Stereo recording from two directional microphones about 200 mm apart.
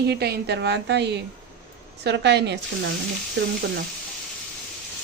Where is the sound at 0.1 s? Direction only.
55° right (ahead or behind).